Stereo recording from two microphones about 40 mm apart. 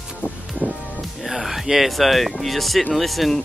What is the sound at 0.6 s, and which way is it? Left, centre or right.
Music, right.